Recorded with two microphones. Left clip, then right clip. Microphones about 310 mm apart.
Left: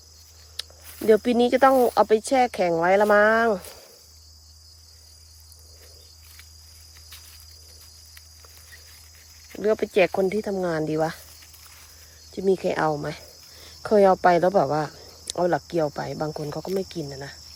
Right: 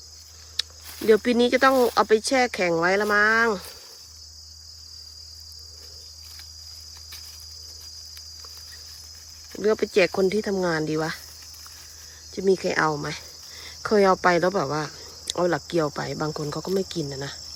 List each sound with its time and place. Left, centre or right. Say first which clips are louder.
0.6 s cricket: right 7 dB; centre
1.0 s speech: even; centre
9.5 s speech: even; centre
12.3 s speech: even; centre